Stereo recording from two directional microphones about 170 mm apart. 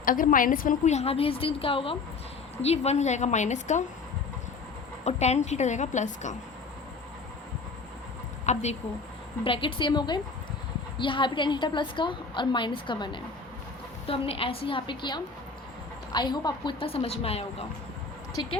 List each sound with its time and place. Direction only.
0.0 s a woman's voice: 55° left (ahead or behind)
5.0 s a woman's voice: 40° left (ahead or behind)
8.5 s a woman's voice: 45° left (ahead or behind)
9.4 s a woman's voice: 30° left (ahead or behind)